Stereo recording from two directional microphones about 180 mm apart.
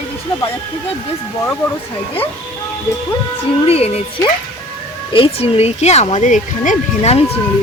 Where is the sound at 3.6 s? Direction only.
35° left (ahead or behind).